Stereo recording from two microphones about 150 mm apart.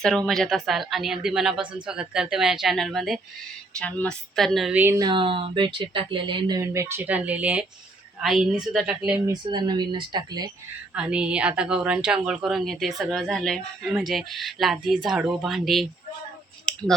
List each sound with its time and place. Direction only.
0.0 s a woman's voice: 5° left (ahead or behind)
4.7 s a woman's voice: 15° right (ahead or behind)
4.9 s a woman's voice: 30° right (ahead or behind); by 8.9 s 5° right (ahead or behind)
9.3 s speech: 30° right (ahead or behind)
10.9 s a woman's voice: 5° right (ahead or behind)